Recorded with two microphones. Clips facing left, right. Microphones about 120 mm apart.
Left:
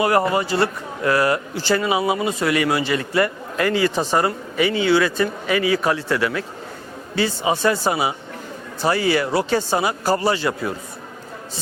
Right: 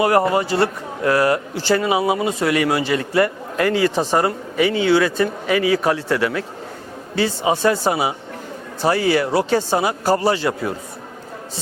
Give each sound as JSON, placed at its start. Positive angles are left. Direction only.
{"t": 0.0, "sound": "a man's voice", "side_deg": -45}
{"t": 3.9, "sound": "speech", "side_deg": -30}
{"t": 4.2, "sound": "a man's voice", "side_deg": -50}
{"t": 10.1, "sound": "a man's voice", "side_deg": -40}